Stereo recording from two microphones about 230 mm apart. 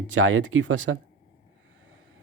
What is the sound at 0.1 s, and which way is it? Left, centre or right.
Speech, right.